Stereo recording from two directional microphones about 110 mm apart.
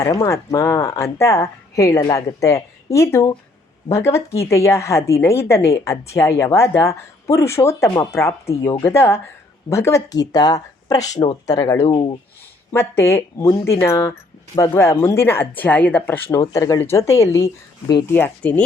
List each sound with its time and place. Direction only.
0.0 s a woman's voice: 30° left (ahead or behind)
11.9 s speech: 50° left (ahead or behind)
12.7 s a woman's voice: 25° left (ahead or behind)